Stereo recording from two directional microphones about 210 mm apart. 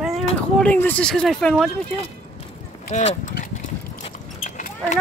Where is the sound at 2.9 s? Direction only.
35° left (ahead or behind).